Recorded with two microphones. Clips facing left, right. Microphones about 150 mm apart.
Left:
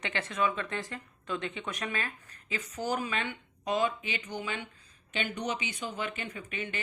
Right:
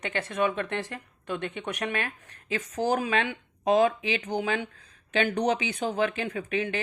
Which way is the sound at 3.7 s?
90° right.